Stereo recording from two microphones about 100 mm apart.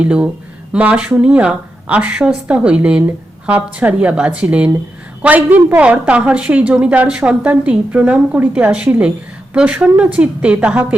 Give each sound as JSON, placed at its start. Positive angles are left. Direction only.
{"t": 0.0, "sound": "a woman's voice", "side_deg": -10}